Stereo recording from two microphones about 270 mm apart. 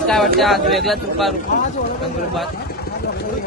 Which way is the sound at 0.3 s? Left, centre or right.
Centre.